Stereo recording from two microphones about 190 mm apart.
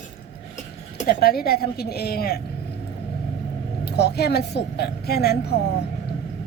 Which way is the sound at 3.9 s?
60° left (ahead or behind).